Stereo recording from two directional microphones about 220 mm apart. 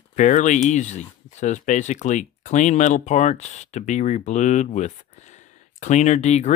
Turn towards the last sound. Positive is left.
turn(degrees=30)  # may be behind; listen again after turning